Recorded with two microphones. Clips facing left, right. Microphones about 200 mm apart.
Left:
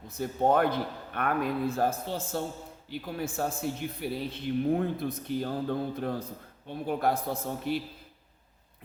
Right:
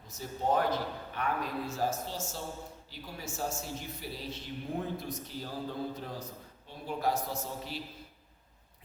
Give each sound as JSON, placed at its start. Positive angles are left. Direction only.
{"t": 0.1, "sound": "speech", "side_deg": 55}